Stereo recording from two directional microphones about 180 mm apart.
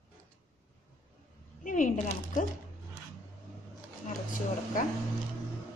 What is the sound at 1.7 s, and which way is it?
Speech, 45° left (ahead or behind).